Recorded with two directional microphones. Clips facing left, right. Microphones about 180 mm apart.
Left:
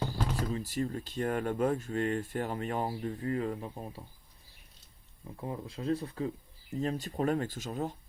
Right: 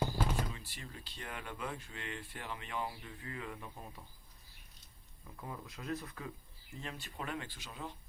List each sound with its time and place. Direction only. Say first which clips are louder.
0.0 s a sound: left 1 dB; 10° right (ahead or behind)
0.5 s speech: left 17 dB; 40° left (ahead or behind)
5.2 s speech: left 8 dB; 30° left (ahead or behind)